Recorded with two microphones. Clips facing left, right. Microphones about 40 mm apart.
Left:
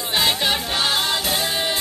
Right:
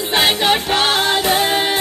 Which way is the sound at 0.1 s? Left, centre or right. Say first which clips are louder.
Right 5 dB; right.